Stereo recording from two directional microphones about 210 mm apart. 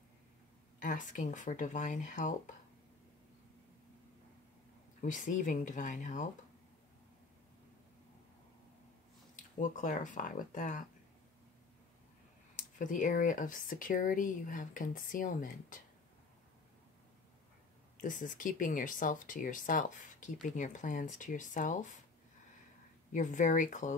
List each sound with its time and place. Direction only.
0.7 s speech: 40° left (ahead or behind)
5.0 s speech: 35° left (ahead or behind)
9.6 s speech: 35° left (ahead or behind)
12.5 s speech: 40° left (ahead or behind)
18.0 s speech: 40° left (ahead or behind)
23.1 s speech: 35° left (ahead or behind)